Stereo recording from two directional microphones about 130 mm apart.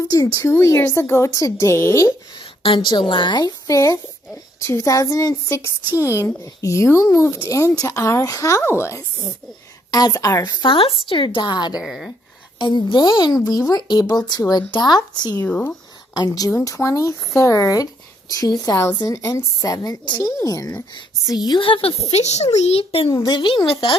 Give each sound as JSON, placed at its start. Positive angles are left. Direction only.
{"t": 0.1, "sound": "speech", "side_deg": 30}
{"t": 2.6, "sound": "speech", "side_deg": 40}
{"t": 11.8, "sound": "speech", "side_deg": 0}
{"t": 12.5, "sound": "speech", "side_deg": 35}
{"t": 15.4, "sound": "speech", "side_deg": 15}
{"t": 16.2, "sound": "a woman's voice", "side_deg": 30}
{"t": 22.0, "sound": "a child's voice", "side_deg": 60}
{"t": 23.0, "sound": "speech", "side_deg": 30}